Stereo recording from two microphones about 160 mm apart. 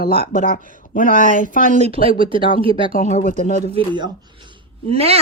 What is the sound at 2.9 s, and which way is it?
Speech, 50° left (ahead or behind).